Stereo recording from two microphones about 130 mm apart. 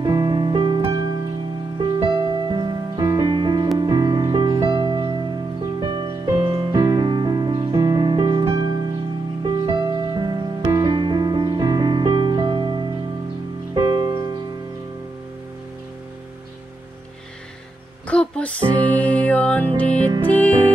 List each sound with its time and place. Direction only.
0.0 s music: 35° right (ahead or behind)
18.0 s a sound: 10° left (ahead or behind)
18.9 s music: 10° left (ahead or behind)